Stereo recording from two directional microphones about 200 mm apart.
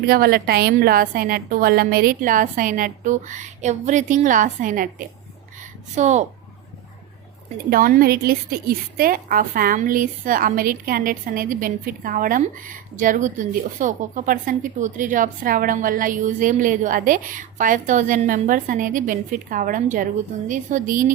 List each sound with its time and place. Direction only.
0.0 s a woman's voice: 50° right (ahead or behind)
7.7 s a woman's voice: 45° right (ahead or behind)